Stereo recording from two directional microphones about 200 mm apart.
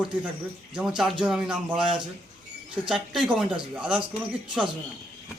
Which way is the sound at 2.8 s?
Centre (ahead or behind).